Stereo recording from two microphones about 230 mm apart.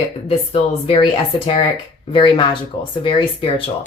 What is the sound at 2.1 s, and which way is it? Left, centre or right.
Speech, left.